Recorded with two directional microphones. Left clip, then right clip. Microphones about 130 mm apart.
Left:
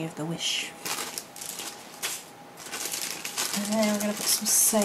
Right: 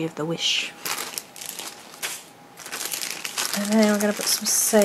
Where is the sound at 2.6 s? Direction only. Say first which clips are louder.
Right 3 dB; centre (ahead or behind).